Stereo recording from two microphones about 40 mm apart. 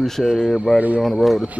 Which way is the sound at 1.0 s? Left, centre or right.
Centre.